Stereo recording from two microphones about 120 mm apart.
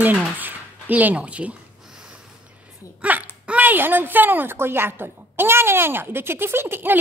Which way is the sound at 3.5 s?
15° right (ahead or behind).